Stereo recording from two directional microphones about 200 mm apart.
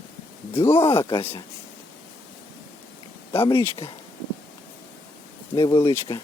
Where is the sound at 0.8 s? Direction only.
25° left (ahead or behind).